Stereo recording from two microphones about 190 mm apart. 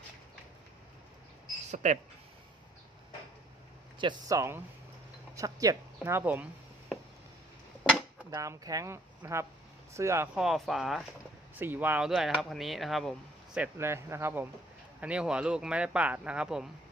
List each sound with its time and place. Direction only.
1.7 s speech: 40° right (ahead or behind)
3.9 s speech: 20° right (ahead or behind)
8.3 s speech: 20° right (ahead or behind)
10.3 s speech: centre (ahead or behind)
13.7 s speech: 15° right (ahead or behind)